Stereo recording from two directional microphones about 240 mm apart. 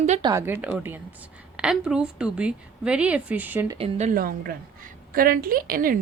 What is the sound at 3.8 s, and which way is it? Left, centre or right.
Speech, right.